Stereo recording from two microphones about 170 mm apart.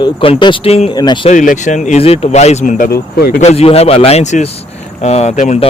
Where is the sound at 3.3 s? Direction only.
40° left (ahead or behind).